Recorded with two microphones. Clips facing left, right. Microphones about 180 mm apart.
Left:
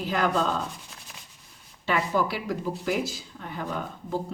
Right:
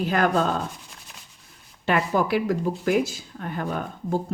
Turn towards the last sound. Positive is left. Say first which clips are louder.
# right 4 dB
turn(degrees=-50)  # may be behind; listen again after turning